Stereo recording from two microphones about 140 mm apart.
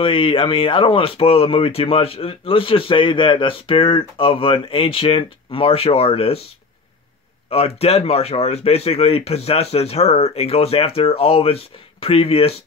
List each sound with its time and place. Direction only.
0.0 s speech: 40° left (ahead or behind)
7.4 s speech: 45° left (ahead or behind)